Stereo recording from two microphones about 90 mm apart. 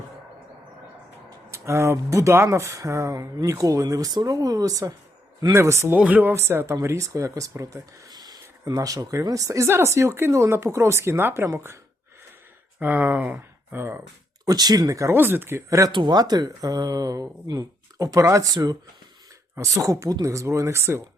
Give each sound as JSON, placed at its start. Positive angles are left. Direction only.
{"t": 1.5, "sound": "speech", "side_deg": -30}
{"t": 6.0, "sound": "speech", "side_deg": -20}
{"t": 6.3, "sound": "speech", "side_deg": -30}
{"t": 12.8, "sound": "speech", "side_deg": -20}
{"t": 14.4, "sound": "speech", "side_deg": -50}
{"t": 15.1, "sound": "speech", "side_deg": -25}
{"t": 15.9, "sound": "speech", "side_deg": -60}